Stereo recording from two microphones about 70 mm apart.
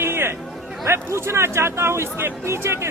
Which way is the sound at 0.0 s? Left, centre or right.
Right.